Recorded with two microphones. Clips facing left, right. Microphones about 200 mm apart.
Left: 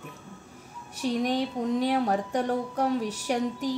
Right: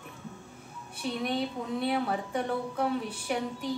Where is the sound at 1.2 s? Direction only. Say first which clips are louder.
Left 3 dB; 40° left (ahead or behind).